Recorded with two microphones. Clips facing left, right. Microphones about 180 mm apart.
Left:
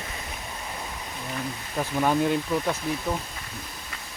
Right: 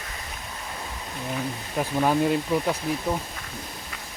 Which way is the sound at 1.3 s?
10° right (ahead or behind).